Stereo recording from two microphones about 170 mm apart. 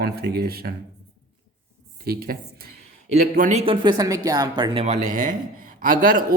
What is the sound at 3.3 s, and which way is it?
Speech, 50° right (ahead or behind).